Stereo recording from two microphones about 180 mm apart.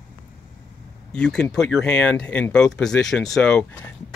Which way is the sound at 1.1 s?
5° left (ahead or behind).